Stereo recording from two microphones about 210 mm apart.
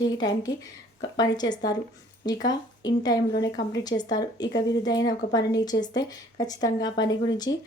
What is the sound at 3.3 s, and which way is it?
Speech, 55° left (ahead or behind).